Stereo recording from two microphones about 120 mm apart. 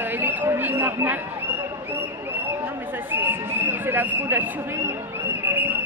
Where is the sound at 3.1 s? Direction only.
15° right (ahead or behind).